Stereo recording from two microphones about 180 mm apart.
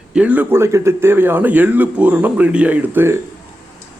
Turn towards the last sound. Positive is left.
turn(degrees=-10)  # may be behind; listen again after turning